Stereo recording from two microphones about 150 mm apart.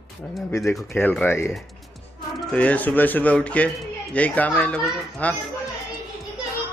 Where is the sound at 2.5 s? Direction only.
10° left (ahead or behind).